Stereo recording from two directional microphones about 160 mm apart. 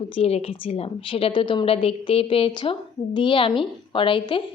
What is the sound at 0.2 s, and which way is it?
A woman's voice, 40° left (ahead or behind).